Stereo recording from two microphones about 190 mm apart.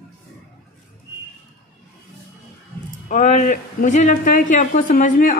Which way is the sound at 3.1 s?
40° left (ahead or behind).